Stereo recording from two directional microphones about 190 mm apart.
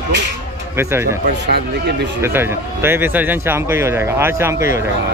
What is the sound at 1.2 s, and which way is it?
Speech, 55° right (ahead or behind).